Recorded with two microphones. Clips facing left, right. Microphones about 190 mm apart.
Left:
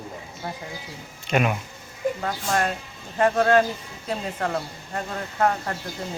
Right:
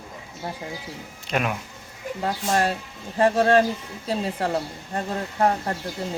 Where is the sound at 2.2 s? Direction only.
30° right (ahead or behind).